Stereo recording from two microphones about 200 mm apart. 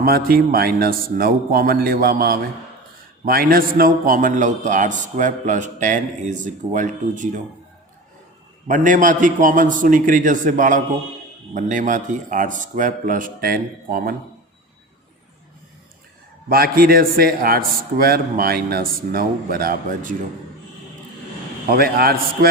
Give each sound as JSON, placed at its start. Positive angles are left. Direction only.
{"t": 0.0, "sound": "a man's voice", "side_deg": -50}
{"t": 8.6, "sound": "a man's voice", "side_deg": -40}
{"t": 16.5, "sound": "a man's voice", "side_deg": -50}
{"t": 21.7, "sound": "a man's voice", "side_deg": -50}